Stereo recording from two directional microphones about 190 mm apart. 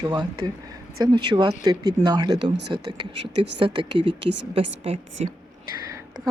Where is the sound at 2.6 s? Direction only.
60° right (ahead or behind).